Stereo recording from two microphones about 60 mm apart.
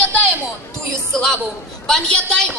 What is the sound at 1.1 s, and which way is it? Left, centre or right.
A woman's voice, centre.